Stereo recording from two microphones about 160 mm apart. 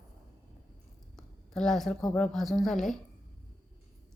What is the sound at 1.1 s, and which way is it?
A woman's voice, 5° left (ahead or behind).